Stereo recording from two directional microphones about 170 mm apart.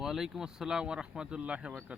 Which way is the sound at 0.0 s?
Centre (ahead or behind).